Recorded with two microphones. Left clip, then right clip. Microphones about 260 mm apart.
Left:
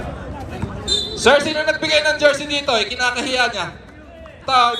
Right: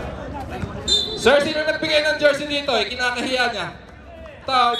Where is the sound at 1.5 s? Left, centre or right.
Left.